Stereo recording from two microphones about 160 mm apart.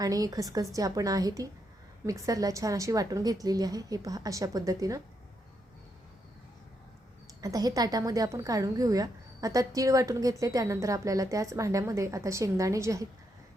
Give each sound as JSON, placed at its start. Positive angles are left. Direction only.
{"t": 0.0, "sound": "a woman's voice", "side_deg": -25}
{"t": 7.4, "sound": "a woman's voice", "side_deg": -20}